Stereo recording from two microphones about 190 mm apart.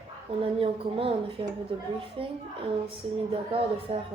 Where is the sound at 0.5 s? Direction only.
30° right (ahead or behind).